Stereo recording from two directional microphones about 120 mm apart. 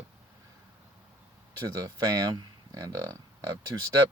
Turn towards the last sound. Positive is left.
turn(degrees=-35)  # may be behind; listen again after turning